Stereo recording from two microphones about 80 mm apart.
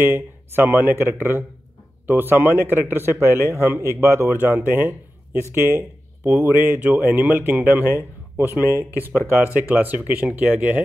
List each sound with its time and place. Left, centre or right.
0.0 s a man's voice: right